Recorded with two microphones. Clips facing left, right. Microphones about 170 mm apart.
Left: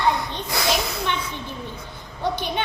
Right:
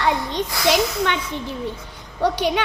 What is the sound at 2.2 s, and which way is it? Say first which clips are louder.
Speech: right 5 dB; 90° right.